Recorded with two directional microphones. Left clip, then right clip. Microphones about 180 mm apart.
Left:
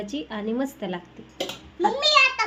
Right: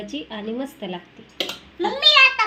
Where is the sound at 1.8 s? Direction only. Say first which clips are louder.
Right 4 dB; 5° left (ahead or behind).